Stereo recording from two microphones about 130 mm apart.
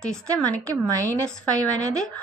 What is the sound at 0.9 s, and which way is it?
Speech, 25° right (ahead or behind).